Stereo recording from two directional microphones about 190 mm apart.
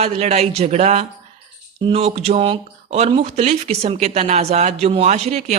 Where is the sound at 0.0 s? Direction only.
35° right (ahead or behind).